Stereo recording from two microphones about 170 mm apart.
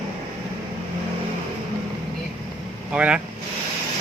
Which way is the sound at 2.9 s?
5° right (ahead or behind).